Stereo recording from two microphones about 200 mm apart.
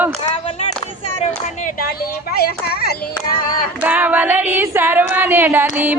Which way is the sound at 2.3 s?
50° left (ahead or behind).